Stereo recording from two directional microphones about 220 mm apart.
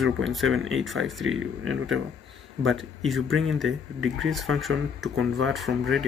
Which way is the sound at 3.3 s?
65° right (ahead or behind).